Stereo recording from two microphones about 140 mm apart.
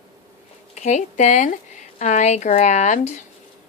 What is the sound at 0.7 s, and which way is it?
Speech, 55° left (ahead or behind).